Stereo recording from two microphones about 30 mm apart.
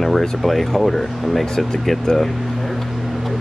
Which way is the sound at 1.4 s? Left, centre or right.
Centre.